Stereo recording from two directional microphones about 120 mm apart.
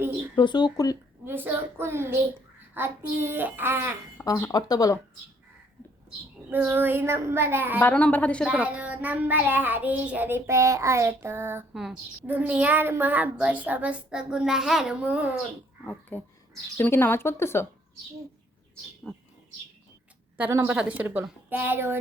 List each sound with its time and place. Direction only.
0.3 s speech: 40° left (ahead or behind)
1.2 s child singing: 15° right (ahead or behind)
4.2 s speech: 20° left (ahead or behind)
6.5 s child singing: 15° right (ahead or behind)
7.8 s a woman's voice: 15° left (ahead or behind)
8.4 s child singing: 10° right (ahead or behind)
11.7 s speech: 5° right (ahead or behind)
12.2 s child singing: 10° right (ahead or behind)
15.8 s speech: 10° left (ahead or behind)
19.0 s speech: 5° left (ahead or behind)
20.3 s speech: 20° right (ahead or behind)
20.7 s child singing: 10° right (ahead or behind)